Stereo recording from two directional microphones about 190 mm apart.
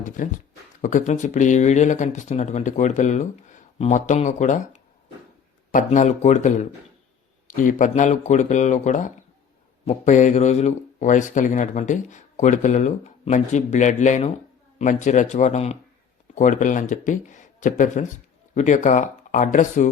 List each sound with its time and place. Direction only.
0.2 s speech: 45° left (ahead or behind)